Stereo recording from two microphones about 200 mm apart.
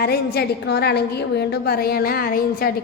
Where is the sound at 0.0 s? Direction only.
50° left (ahead or behind).